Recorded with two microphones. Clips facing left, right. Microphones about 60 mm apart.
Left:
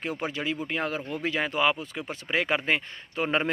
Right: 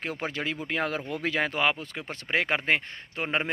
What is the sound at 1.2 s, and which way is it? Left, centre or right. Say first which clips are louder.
Speech: left 1 dB; right.